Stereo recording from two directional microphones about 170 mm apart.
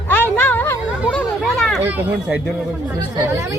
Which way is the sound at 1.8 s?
10° right (ahead or behind).